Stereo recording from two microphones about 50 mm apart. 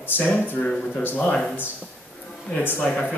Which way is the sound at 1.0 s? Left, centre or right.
Left.